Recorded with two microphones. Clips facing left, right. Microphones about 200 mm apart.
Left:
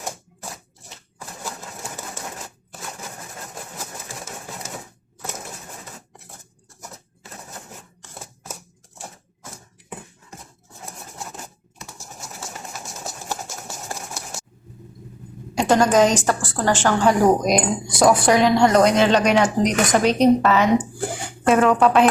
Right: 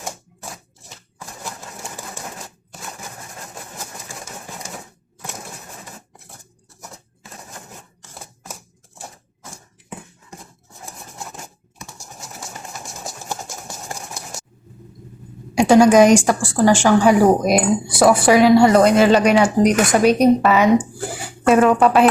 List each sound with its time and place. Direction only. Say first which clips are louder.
15.5 s speech: right 6 dB; 10° right (ahead or behind)